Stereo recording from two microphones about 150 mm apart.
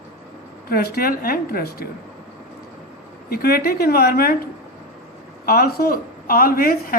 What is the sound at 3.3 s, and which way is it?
A woman's voice, 90° left.